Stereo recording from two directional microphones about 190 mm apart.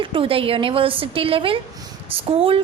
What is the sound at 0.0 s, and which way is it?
A woman's voice, 30° right (ahead or behind).